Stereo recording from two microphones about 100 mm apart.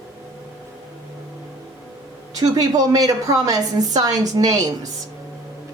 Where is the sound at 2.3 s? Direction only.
40° right (ahead or behind).